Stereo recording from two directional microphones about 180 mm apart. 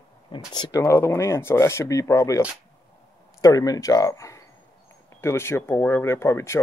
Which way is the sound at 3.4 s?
20° left (ahead or behind).